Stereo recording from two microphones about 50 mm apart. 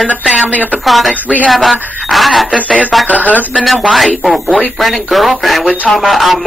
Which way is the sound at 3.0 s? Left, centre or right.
Left.